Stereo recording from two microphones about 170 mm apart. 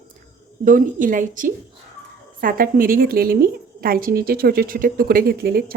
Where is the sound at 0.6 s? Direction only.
50° right (ahead or behind).